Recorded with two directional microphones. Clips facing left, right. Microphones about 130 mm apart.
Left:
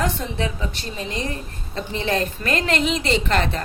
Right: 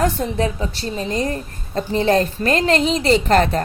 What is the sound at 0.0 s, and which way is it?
A woman's voice, 40° right (ahead or behind).